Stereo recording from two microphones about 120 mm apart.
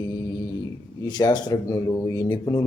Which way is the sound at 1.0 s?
35° left (ahead or behind).